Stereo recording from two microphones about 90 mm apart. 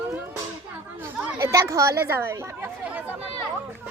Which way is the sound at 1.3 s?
35° right (ahead or behind).